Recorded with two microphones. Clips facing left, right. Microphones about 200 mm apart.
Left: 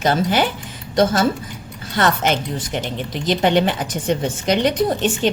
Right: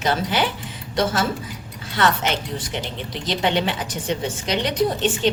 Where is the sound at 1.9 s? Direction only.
45° left (ahead or behind).